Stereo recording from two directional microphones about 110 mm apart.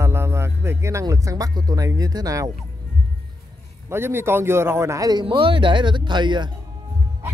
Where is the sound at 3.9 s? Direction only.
20° right (ahead or behind).